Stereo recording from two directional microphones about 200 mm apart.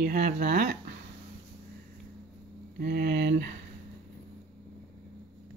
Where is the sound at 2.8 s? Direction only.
50° right (ahead or behind).